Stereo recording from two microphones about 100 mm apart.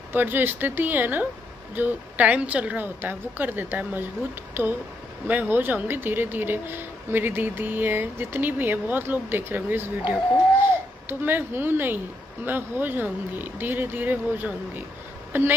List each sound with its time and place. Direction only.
0.1 s a woman's voice: 20° right (ahead or behind)